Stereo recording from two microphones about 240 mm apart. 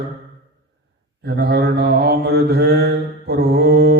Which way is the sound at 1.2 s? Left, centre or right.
Right.